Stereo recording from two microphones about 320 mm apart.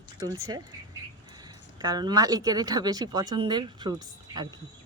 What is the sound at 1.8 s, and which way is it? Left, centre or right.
Speech, centre.